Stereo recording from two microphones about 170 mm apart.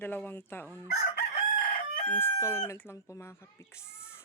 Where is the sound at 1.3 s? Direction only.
50° left (ahead or behind).